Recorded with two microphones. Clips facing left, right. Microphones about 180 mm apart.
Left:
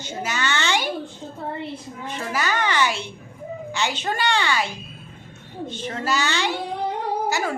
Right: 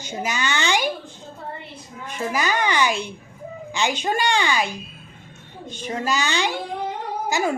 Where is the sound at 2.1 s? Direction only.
15° right (ahead or behind).